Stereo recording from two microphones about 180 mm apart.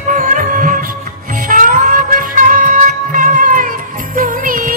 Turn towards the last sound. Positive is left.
turn(degrees=-50)  # may be behind; listen again after turning